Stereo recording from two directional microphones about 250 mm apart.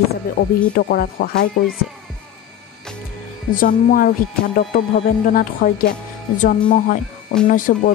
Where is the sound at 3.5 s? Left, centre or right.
Left.